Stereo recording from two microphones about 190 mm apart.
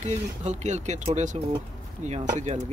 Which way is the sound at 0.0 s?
35° right (ahead or behind).